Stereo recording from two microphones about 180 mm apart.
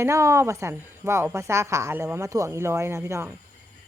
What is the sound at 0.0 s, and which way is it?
A woman's voice, 15° right (ahead or behind).